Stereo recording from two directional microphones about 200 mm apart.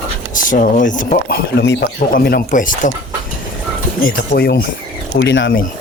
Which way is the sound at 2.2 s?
50° left (ahead or behind).